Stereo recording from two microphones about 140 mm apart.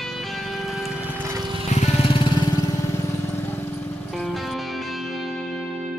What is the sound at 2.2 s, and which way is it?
Music, 25° left (ahead or behind).